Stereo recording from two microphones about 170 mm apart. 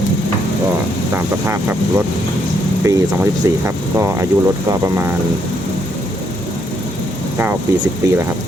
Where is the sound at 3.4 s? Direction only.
20° right (ahead or behind).